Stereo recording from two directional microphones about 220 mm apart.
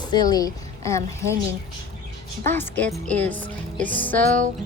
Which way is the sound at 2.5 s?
5° left (ahead or behind).